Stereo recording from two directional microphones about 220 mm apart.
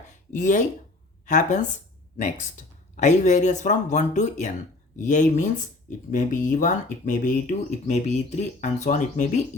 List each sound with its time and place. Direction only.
0.3 s speech: 35° left (ahead or behind)